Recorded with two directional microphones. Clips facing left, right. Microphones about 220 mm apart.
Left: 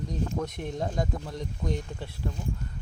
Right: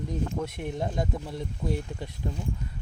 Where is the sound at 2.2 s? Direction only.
20° right (ahead or behind).